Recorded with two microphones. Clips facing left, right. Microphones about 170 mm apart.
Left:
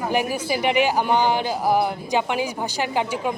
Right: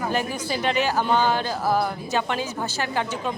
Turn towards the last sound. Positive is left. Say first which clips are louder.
# left 3 dB
turn(degrees=15)  # may be behind; listen again after turning